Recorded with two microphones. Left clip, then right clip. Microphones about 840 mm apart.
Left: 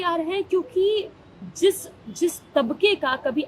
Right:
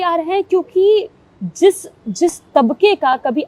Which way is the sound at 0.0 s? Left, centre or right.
Right.